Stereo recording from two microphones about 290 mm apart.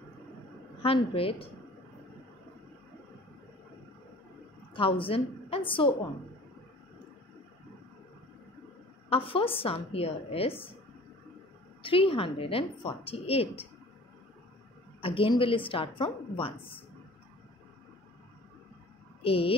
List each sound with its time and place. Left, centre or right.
0.8 s a woman's voice: centre
4.7 s a woman's voice: centre
9.1 s a woman's voice: centre
11.8 s a woman's voice: centre
15.0 s a woman's voice: centre
19.2 s speech: centre